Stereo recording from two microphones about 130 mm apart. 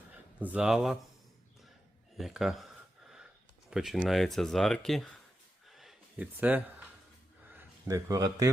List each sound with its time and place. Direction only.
0.3 s speech: 10° right (ahead or behind)
2.1 s speech: centre (ahead or behind)
3.7 s speech: 5° right (ahead or behind)
5.6 s a sound: centre (ahead or behind)
6.3 s speech: 10° right (ahead or behind)
7.5 s a man's voice: 25° right (ahead or behind)